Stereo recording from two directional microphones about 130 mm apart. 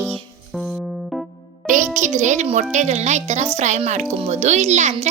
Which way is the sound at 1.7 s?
75° right (ahead or behind).